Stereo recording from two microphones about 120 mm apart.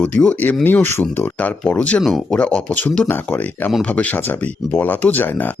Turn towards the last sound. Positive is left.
turn(degrees=15)  # may be behind; listen again after turning